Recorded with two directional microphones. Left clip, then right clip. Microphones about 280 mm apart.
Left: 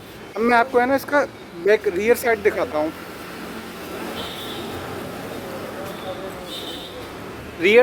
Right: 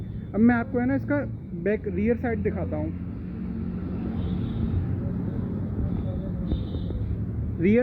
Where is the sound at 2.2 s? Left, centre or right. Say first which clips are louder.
Left 10 dB; left.